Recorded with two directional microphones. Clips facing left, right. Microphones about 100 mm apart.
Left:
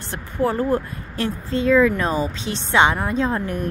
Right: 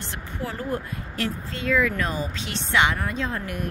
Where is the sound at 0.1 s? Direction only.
35° left (ahead or behind).